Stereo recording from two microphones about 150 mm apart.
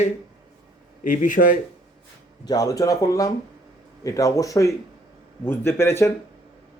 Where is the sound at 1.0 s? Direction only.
60° left (ahead or behind).